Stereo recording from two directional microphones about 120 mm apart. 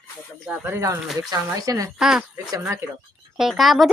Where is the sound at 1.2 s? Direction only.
30° right (ahead or behind).